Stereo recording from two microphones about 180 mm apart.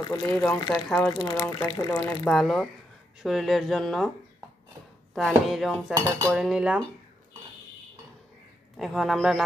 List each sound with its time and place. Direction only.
0.0 s speech: 20° left (ahead or behind)
0.6 s speech: 20° left (ahead or behind)
0.8 s speech: 5° left (ahead or behind)
1.1 s speech: 20° left (ahead or behind)
2.2 s speech: 5° left (ahead or behind)
5.1 s speech: centre (ahead or behind)
5.9 s cutlery: 20° right (ahead or behind)
6.3 s speech: 5° right (ahead or behind)
8.7 s speech: centre (ahead or behind)